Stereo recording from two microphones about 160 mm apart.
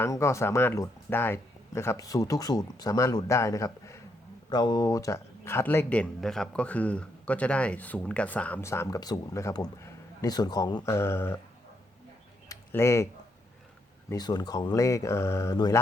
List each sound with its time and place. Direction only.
0.0 s speech: 15° left (ahead or behind)
12.5 s a sound: 20° left (ahead or behind)
14.1 s speech: 25° left (ahead or behind)